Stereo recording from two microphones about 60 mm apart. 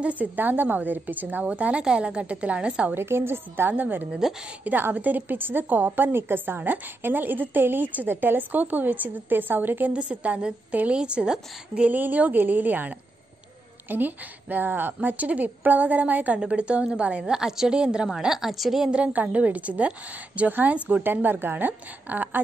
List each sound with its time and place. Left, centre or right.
0.0 s a woman's voice: right
1.5 s a woman's voice: centre
2.9 s a woman's voice: right
9.9 s a woman's voice: right
11.9 s a woman's voice: right; by 18.9 s centre
19.1 s a woman's voice: right